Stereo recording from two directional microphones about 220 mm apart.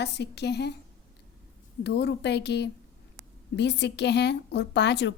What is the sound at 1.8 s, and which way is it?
A woman's voice, 50° left (ahead or behind).